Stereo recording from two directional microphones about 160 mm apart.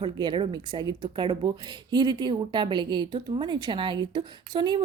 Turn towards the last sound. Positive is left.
turn(degrees=-30)  # may be behind; listen again after turning